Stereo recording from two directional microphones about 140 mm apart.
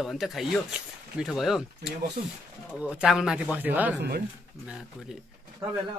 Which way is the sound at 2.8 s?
10° right (ahead or behind).